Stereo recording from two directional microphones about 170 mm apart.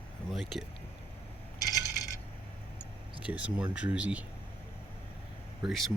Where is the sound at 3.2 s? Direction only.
10° right (ahead or behind).